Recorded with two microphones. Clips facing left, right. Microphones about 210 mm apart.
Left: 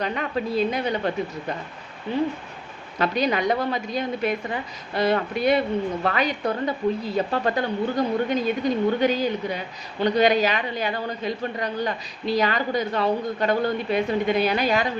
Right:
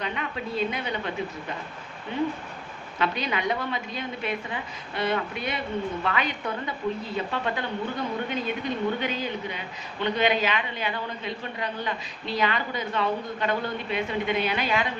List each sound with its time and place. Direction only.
0.0 s a woman's voice: 40° left (ahead or behind)
3.0 s a woman's voice: 40° left (ahead or behind)